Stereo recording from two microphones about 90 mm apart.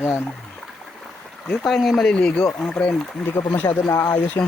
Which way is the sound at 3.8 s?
35° left (ahead or behind).